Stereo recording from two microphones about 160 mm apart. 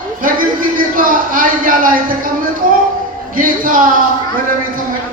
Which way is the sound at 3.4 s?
60° right (ahead or behind).